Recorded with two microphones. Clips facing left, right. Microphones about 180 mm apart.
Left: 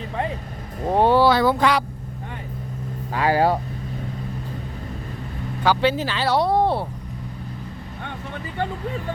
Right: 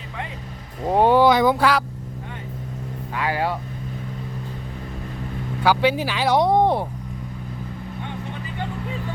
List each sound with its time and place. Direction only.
0.9 s speech: 15° right (ahead or behind)
3.1 s vehicle: 35° left (ahead or behind)
5.6 s speech: 10° right (ahead or behind)